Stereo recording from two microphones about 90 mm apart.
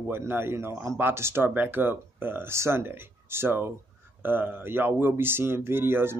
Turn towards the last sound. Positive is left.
turn(degrees=-25)  # may be behind; listen again after turning